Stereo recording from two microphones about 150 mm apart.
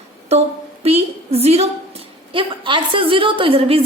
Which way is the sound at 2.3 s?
35° right (ahead or behind).